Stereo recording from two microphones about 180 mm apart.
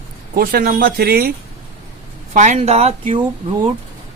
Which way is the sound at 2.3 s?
40° right (ahead or behind).